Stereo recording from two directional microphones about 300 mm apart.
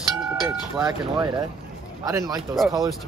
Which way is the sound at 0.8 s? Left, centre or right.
Centre.